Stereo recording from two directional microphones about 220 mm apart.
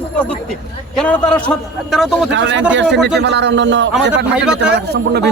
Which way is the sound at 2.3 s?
55° right (ahead or behind).